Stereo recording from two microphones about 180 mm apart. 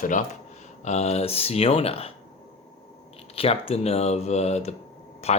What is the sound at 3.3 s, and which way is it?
Speech, 30° left (ahead or behind).